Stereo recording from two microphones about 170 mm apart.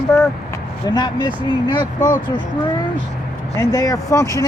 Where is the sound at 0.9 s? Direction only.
25° left (ahead or behind).